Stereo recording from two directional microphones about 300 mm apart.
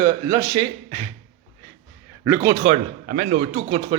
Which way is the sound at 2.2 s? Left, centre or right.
Centre.